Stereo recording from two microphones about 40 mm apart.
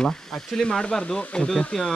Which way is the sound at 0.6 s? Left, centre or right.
Left.